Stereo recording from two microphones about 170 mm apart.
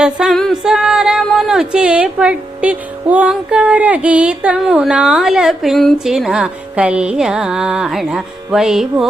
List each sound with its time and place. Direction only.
0.0 s speech: 5° right (ahead or behind)